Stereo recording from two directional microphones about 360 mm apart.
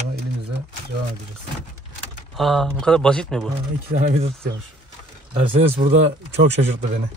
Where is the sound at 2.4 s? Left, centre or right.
Centre.